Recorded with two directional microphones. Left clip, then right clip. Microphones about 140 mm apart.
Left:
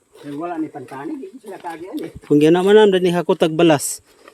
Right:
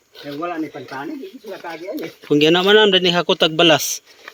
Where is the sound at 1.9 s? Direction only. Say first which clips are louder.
Left 2 dB; 40° left (ahead or behind).